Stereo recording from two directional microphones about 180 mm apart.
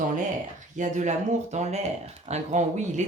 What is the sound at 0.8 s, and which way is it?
Speech, 45° right (ahead or behind).